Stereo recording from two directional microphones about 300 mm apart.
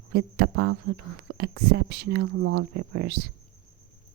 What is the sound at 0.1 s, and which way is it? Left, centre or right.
Speech, right.